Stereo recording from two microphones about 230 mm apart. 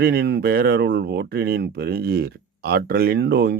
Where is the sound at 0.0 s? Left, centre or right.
Right.